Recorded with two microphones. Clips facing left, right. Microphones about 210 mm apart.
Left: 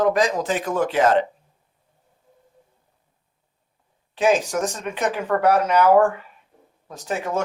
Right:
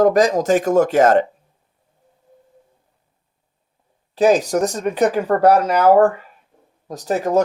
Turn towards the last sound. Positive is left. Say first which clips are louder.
# right 8 dB
turn(degrees=-40)  # may be behind; listen again after turning